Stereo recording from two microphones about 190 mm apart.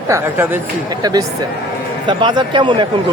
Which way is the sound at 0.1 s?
10° right (ahead or behind).